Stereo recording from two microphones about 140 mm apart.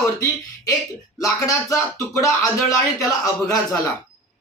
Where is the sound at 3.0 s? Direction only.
25° left (ahead or behind).